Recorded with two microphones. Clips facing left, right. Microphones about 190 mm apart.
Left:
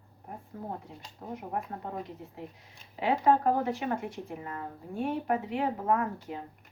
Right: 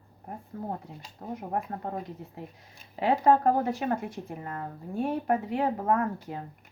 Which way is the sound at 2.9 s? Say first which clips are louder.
Right 3 dB; 40° right (ahead or behind).